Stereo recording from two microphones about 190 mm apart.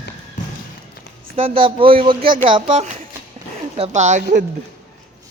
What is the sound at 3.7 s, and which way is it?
Speech, 35° right (ahead or behind).